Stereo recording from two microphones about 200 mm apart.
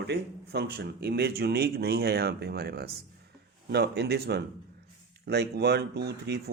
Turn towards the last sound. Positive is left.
turn(degrees=-55)  # may be behind; listen again after turning